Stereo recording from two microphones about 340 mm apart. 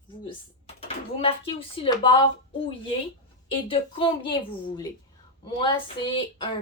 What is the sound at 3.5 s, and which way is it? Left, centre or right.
A woman's voice, centre.